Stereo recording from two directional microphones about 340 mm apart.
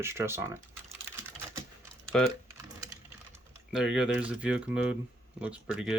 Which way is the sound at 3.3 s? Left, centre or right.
Centre.